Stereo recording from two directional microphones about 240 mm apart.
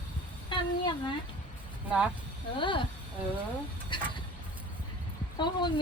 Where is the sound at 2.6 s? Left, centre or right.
Left.